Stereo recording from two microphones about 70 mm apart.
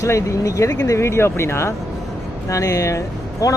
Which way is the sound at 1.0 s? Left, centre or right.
Left.